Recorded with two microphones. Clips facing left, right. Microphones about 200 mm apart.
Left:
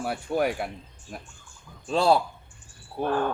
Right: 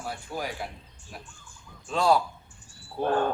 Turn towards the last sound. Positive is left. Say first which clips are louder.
# even
turn(degrees=15)  # may be behind; listen again after turning